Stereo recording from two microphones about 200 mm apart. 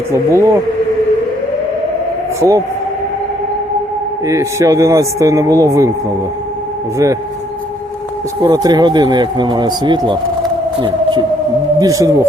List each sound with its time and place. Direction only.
0.1 s speech: 15° right (ahead or behind)
2.4 s speech: 15° right (ahead or behind)
4.3 s speech: 15° right (ahead or behind)
8.4 s speech: 15° right (ahead or behind)
10.8 s a sound: 25° right (ahead or behind)
11.8 s speech: 15° right (ahead or behind)